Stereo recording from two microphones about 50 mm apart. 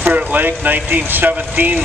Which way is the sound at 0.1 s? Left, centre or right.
Right.